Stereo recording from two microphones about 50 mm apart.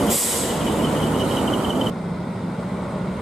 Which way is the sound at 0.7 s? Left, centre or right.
Centre.